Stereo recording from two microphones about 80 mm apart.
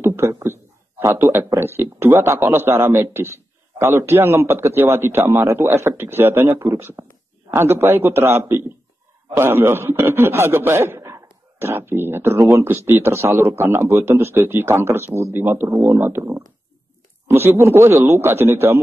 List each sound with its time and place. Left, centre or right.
0.0 s a sound: right
1.2 s a man's voice: right
15.7 s a man's voice: right
16.0 s a man's voice: right